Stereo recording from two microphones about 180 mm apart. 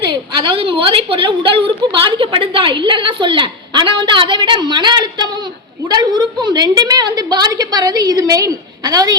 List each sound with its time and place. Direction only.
0.1 s a woman's voice: 30° right (ahead or behind)